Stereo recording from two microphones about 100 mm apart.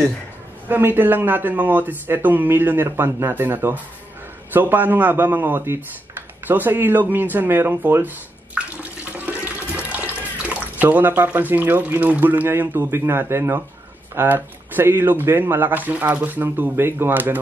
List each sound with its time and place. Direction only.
0.7 s speech: 20° right (ahead or behind)
8.5 s water tap: 15° right (ahead or behind)
14.1 s speech: 20° right (ahead or behind)